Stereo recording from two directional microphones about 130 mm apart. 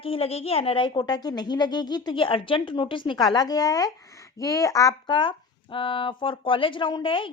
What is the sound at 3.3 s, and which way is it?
Speech, 30° left (ahead or behind).